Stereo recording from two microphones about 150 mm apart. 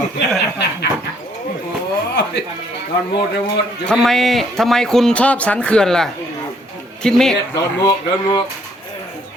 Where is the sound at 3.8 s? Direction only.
5° left (ahead or behind).